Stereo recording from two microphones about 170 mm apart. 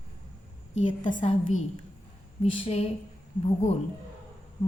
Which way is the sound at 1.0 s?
45° left (ahead or behind).